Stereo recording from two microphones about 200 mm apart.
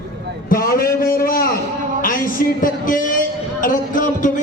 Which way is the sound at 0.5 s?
45° left (ahead or behind).